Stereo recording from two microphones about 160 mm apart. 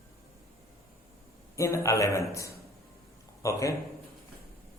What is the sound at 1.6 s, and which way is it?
Speech, 20° left (ahead or behind).